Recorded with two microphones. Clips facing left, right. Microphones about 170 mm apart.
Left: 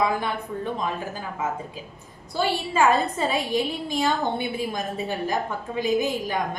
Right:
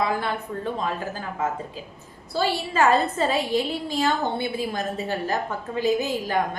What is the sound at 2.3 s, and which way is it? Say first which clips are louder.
A woman's voice: even; 15° left (ahead or behind).